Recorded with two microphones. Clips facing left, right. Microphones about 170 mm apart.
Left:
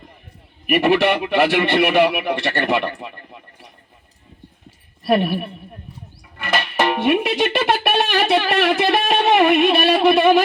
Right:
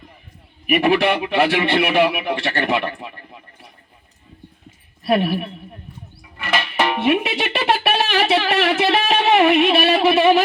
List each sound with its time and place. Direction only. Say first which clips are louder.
0.7 s speech: left 1 dB; centre (ahead or behind)
5.0 s speech: even; centre (ahead or behind)
6.8 s speech: left 1 dB; centre (ahead or behind)